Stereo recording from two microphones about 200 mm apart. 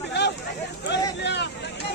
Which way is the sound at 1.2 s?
60° left (ahead or behind).